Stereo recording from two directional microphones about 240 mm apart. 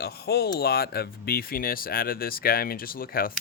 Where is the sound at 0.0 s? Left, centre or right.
Left.